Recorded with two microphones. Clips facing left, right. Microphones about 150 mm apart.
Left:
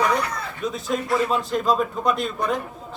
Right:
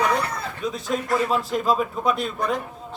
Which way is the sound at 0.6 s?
Centre (ahead or behind).